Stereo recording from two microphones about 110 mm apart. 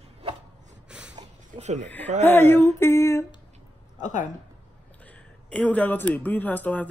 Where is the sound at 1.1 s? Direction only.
90° right.